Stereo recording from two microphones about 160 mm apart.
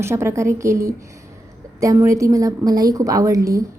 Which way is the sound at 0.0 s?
15° right (ahead or behind).